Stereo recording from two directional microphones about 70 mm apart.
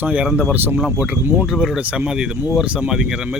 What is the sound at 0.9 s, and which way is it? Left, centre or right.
Speech, centre.